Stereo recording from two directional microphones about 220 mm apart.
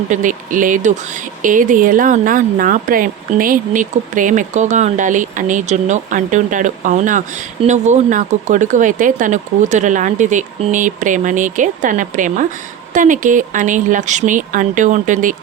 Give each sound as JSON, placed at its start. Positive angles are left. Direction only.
{"t": 0.1, "sound": "speech", "side_deg": -35}